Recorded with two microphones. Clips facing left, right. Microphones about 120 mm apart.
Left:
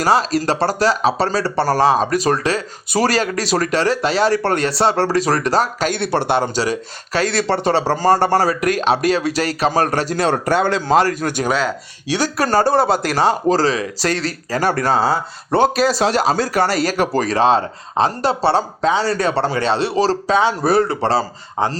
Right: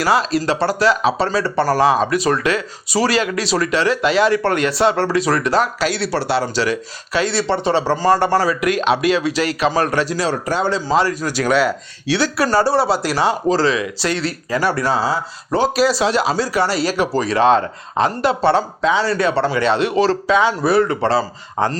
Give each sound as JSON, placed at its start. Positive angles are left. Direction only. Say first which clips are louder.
{"t": 0.0, "sound": "speech", "louder": "left 1 dB", "side_deg": 40}
{"t": 6.6, "sound": "speech", "louder": "right 1 dB", "side_deg": 40}
{"t": 11.4, "sound": "speech", "louder": "right 4 dB", "side_deg": 0}
{"t": 12.1, "sound": "speech", "louder": "even", "side_deg": 45}
{"t": 17.4, "sound": "speech", "louder": "right 3 dB", "side_deg": 30}
{"t": 21.6, "sound": "speech", "louder": "right 1 dB", "side_deg": 20}